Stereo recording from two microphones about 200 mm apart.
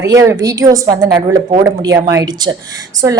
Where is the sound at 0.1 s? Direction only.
15° right (ahead or behind).